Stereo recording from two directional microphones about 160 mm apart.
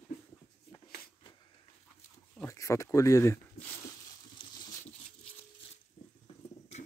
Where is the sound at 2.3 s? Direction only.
20° left (ahead or behind).